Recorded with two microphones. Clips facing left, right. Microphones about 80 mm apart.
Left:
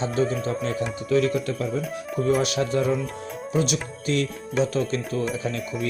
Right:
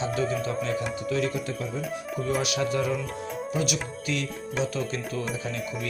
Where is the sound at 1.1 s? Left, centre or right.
Left.